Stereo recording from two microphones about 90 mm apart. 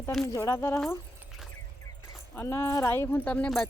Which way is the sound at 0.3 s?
35° left (ahead or behind).